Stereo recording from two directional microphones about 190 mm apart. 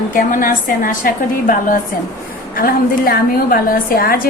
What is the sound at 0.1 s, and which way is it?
A woman's voice, 45° left (ahead or behind).